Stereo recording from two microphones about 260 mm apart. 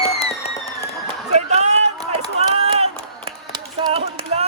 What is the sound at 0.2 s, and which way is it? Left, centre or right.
Music, left.